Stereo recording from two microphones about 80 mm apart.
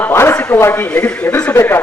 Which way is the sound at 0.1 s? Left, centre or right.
Left.